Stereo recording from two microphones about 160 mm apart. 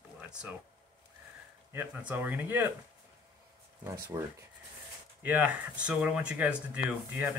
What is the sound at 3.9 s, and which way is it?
Speech, 20° right (ahead or behind).